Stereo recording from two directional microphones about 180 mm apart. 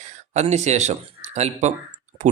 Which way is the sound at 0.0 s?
40° right (ahead or behind).